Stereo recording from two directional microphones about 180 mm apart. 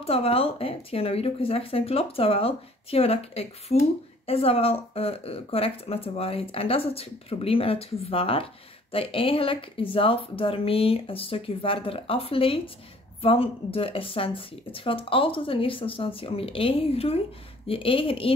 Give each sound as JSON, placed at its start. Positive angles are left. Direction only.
{"t": 0.0, "sound": "speech", "side_deg": 30}